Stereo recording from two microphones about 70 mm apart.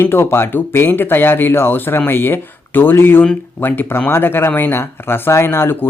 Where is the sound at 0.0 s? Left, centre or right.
Left.